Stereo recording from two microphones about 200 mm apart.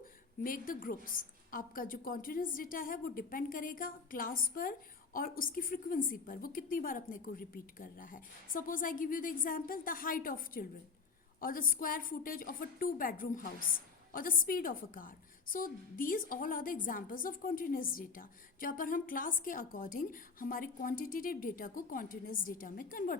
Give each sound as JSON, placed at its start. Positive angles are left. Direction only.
{"t": 0.4, "sound": "a woman's voice", "side_deg": 45}